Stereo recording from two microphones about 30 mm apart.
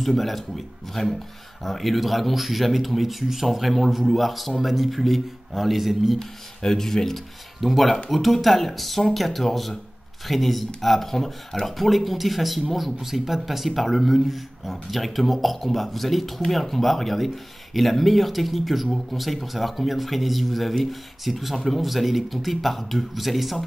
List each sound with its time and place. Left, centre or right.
0.0 s speech: centre
1.0 s speech: left
1.6 s speech: centre
6.1 s speech: centre
7.6 s speech: centre